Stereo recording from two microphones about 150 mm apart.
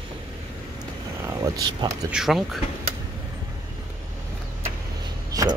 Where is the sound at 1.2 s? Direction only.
25° right (ahead or behind).